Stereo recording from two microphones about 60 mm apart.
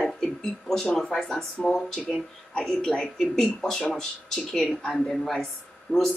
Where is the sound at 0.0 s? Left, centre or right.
Centre.